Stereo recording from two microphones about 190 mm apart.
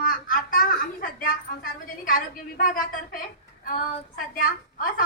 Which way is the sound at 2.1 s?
45° left (ahead or behind).